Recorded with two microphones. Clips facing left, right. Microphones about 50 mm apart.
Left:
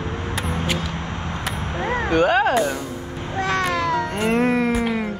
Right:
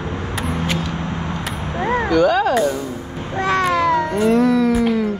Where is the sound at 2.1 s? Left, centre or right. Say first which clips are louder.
Right 1 dB; left.